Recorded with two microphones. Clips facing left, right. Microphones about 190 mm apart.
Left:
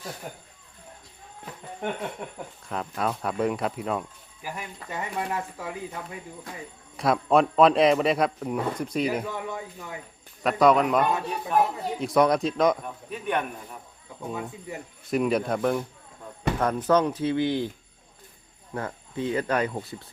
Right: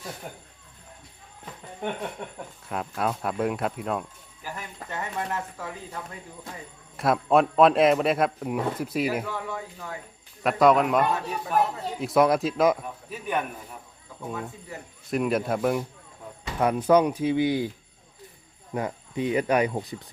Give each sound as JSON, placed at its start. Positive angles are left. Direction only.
{"t": 2.6, "sound": "speech", "side_deg": -5}
{"t": 4.4, "sound": "speech", "side_deg": 10}
{"t": 6.9, "sound": "speech", "side_deg": 0}
{"t": 9.2, "sound": "a man's voice", "side_deg": 20}
{"t": 10.4, "sound": "speech", "side_deg": 0}
{"t": 15.1, "sound": "speech", "side_deg": 0}
{"t": 18.7, "sound": "speech", "side_deg": -15}